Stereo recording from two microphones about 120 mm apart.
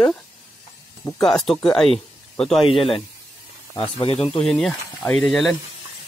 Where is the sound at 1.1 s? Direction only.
5° left (ahead or behind).